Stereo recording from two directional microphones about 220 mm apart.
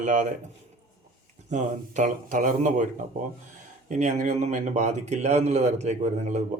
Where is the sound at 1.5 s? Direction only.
35° right (ahead or behind).